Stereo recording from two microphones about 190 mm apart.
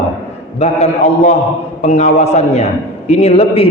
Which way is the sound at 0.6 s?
35° left (ahead or behind).